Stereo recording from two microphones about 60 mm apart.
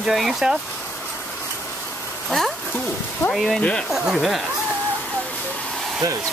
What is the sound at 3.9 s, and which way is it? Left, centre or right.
Speech, centre.